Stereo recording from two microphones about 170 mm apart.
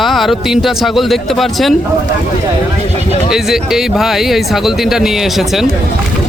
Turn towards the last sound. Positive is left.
turn(degrees=0)  # may be behind; listen again after turning